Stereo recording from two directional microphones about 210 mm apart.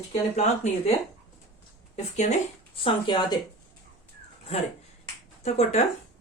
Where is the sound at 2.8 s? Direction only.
20° left (ahead or behind).